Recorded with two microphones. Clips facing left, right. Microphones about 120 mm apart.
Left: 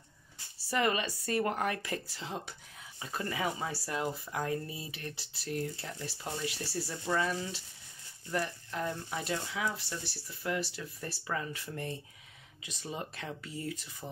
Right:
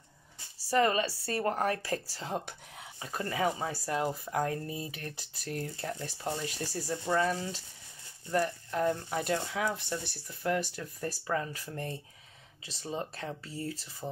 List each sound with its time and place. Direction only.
0.7 s speech: 35° right (ahead or behind)
3.0 s speech: 35° right (ahead or behind)